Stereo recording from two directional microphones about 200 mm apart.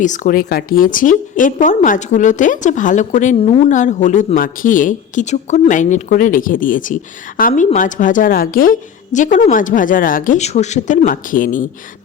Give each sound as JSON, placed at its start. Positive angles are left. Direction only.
{"t": 0.0, "sound": "a woman's voice", "side_deg": 40}